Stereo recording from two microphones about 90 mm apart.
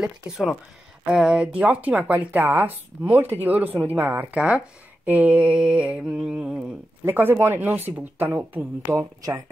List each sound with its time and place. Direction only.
1.0 s mantra: 10° right (ahead or behind)
1.6 s speech: 15° right (ahead or behind)
5.0 s mantra: 15° right (ahead or behind)
7.1 s speech: 25° right (ahead or behind)